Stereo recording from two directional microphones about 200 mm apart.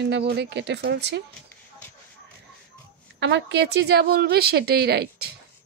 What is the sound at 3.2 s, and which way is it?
A woman's voice, 60° right (ahead or behind).